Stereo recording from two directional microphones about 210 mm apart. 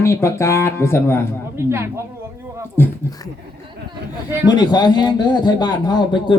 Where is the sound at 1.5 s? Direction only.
10° right (ahead or behind).